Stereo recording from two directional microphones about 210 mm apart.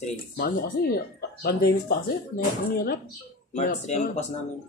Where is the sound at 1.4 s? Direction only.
45° left (ahead or behind).